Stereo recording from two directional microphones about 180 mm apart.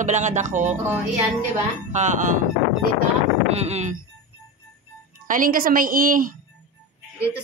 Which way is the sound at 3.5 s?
35° right (ahead or behind).